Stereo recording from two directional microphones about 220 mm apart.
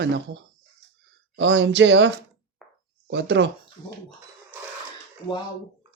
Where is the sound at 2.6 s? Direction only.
Centre (ahead or behind).